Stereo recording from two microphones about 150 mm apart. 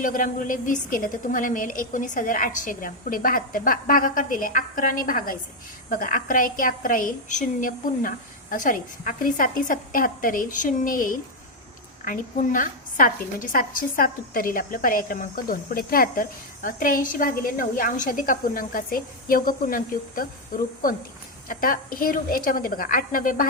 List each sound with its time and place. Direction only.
0.0 s a woman's voice: 65° left (ahead or behind)